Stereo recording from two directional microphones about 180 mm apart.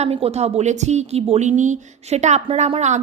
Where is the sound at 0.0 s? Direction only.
35° right (ahead or behind).